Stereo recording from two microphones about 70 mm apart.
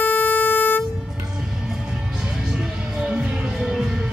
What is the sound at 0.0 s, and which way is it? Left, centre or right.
Vehicle, left.